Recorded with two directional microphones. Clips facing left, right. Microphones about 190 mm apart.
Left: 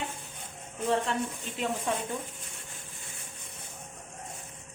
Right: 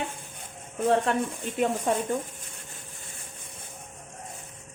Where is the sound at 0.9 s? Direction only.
50° right (ahead or behind).